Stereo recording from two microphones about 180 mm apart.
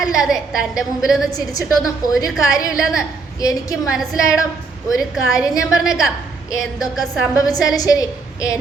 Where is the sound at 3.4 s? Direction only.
20° left (ahead or behind).